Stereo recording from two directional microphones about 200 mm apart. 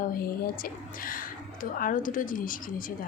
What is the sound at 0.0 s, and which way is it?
A woman's voice, 45° left (ahead or behind).